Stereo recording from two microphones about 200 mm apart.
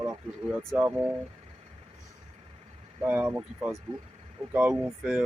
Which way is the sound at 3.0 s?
10° right (ahead or behind).